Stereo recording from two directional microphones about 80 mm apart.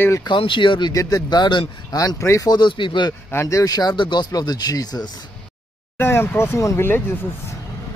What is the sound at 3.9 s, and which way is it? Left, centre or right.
Speech, left.